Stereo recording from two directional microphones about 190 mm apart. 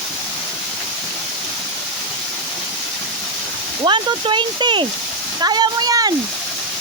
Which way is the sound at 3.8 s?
25° right (ahead or behind).